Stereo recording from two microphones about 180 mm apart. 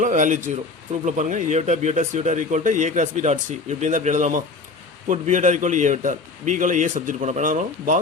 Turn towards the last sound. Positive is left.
turn(degrees=-45)  # may be behind; listen again after turning